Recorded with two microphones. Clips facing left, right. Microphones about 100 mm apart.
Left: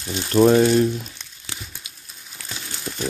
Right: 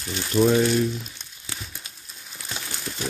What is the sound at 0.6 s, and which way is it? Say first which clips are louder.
Speech: left 5 dB; 40° left (ahead or behind).